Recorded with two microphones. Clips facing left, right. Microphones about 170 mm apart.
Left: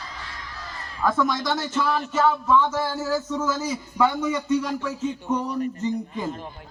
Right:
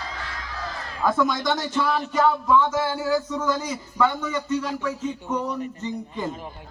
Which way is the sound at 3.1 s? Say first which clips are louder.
Right 1 dB; 5° left (ahead or behind).